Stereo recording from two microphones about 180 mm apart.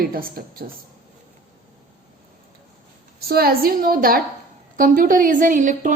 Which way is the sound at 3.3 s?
55° right (ahead or behind).